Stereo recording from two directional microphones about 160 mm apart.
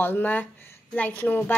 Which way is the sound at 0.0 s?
10° left (ahead or behind).